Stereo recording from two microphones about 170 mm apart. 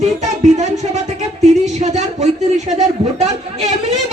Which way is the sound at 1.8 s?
40° right (ahead or behind).